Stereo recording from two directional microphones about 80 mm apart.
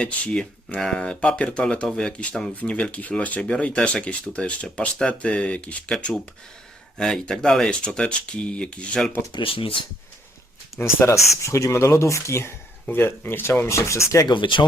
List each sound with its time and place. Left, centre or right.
0.0 s speech: centre
9.3 s speech: left
10.8 s speech: left
14.3 s speech: left